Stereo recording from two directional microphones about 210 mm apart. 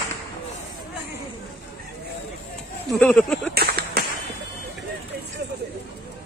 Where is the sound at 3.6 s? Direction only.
50° right (ahead or behind).